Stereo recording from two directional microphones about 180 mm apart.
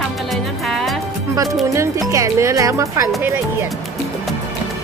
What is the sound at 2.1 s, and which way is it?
Speech, 15° right (ahead or behind).